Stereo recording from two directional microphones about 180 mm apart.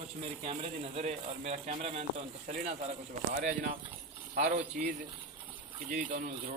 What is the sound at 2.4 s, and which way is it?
Speech, 45° right (ahead or behind).